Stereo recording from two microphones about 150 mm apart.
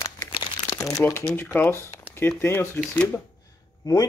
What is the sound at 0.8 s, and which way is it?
Speech, 15° left (ahead or behind).